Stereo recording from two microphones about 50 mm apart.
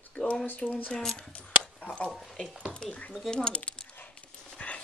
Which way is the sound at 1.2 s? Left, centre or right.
Left.